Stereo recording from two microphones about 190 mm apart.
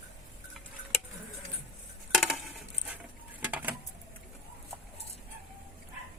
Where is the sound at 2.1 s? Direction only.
Centre (ahead or behind).